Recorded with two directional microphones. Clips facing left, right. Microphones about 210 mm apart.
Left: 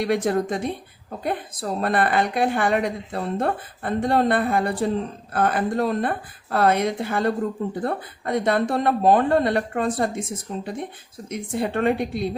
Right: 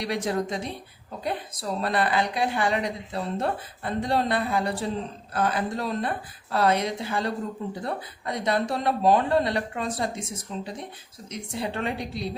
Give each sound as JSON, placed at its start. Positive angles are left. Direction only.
{"t": 0.0, "sound": "speech", "side_deg": 55}